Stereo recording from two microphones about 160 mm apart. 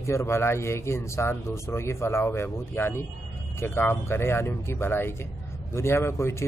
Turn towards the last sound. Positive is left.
turn(degrees=15)  # may be behind; listen again after turning